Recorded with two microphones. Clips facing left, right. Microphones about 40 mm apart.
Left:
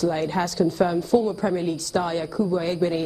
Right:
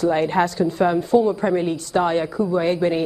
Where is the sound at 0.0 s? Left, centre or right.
Right.